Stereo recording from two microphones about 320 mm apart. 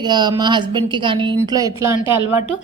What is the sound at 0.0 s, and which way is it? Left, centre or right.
A woman's voice, centre.